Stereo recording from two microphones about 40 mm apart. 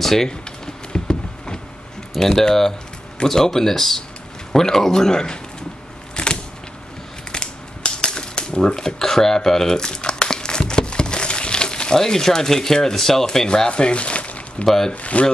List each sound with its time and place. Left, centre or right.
0.0 s speech: centre
0.9 s a sound: left
2.1 s speech: centre
6.2 s a sound: left
7.3 s typewriter: centre
8.7 s speech: centre
9.8 s crumpling: left
13.5 s speech: left